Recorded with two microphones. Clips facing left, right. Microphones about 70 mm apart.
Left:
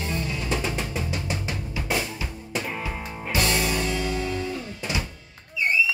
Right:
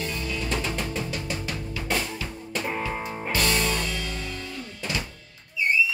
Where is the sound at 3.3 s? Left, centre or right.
Centre.